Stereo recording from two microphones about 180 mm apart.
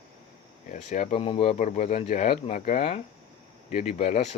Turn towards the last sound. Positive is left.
turn(degrees=40)  # may be behind; listen again after turning